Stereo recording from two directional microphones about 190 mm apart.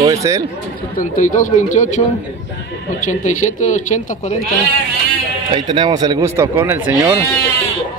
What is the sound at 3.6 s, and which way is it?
Speech, 40° left (ahead or behind).